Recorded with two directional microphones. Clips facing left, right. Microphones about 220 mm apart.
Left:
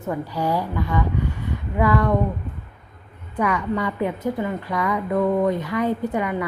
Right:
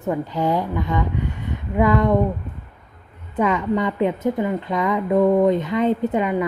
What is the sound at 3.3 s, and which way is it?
A woman's voice, 20° right (ahead or behind).